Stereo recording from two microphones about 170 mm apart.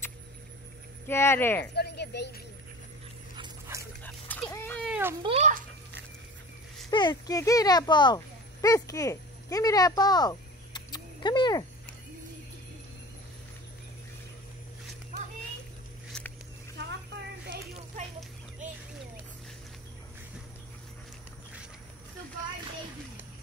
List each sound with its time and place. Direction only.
1.0 s speech: 15° left (ahead or behind)
1.8 s speech: 75° left (ahead or behind)
4.0 s dog: 10° left (ahead or behind)
4.5 s cat: 10° left (ahead or behind)
4.8 s cat: 10° right (ahead or behind)
5.2 s a child's voice: 35° right (ahead or behind)
6.9 s speech: 25° left (ahead or behind)
16.1 s a sound: 5° left (ahead or behind)
18.6 s a sound: 50° right (ahead or behind)